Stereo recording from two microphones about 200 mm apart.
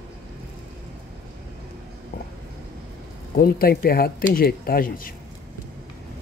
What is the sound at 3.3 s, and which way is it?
Speech, 45° left (ahead or behind).